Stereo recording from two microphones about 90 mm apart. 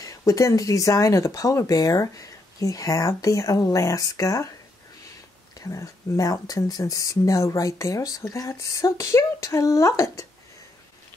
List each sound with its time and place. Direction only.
0.0 s speech: 40° left (ahead or behind)
5.6 s speech: 40° left (ahead or behind)